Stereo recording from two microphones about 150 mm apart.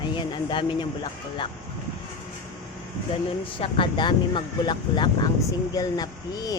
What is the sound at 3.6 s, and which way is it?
Speech, 35° left (ahead or behind).